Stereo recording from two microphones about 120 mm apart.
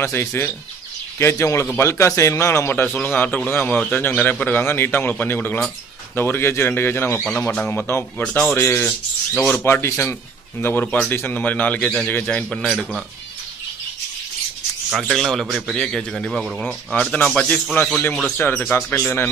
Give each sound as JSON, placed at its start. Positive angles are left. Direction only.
{"t": 0.0, "sound": "a man's voice", "side_deg": 20}
{"t": 14.9, "sound": "a man's voice", "side_deg": -5}
{"t": 18.4, "sound": "a man's voice", "side_deg": 20}